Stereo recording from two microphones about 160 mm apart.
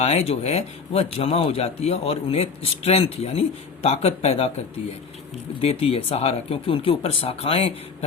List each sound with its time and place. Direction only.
0.0 s speech: 40° left (ahead or behind)